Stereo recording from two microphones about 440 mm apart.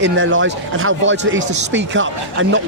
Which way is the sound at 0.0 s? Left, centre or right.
Right.